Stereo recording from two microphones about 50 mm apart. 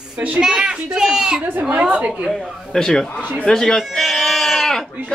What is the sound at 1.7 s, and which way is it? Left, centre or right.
Speech, right.